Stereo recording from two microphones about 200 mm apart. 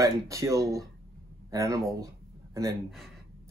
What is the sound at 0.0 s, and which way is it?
Speech, 15° right (ahead or behind).